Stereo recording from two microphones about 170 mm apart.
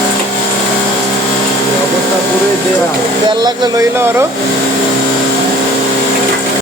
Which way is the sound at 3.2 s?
25° right (ahead or behind).